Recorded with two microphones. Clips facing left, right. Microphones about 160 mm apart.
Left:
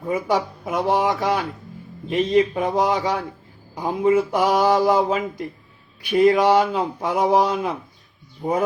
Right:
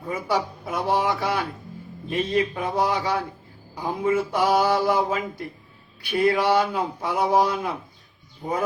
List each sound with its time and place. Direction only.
0.1 s mantra: 20° left (ahead or behind)
0.9 s speech: 20° left (ahead or behind)
2.0 s mantra: 20° left (ahead or behind)
6.1 s speech: 20° left (ahead or behind)